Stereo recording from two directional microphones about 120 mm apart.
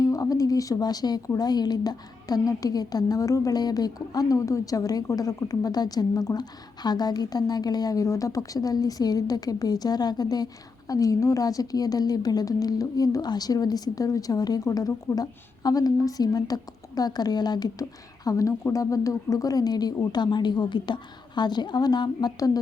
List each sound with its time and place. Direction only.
0.0 s speech: 30° left (ahead or behind)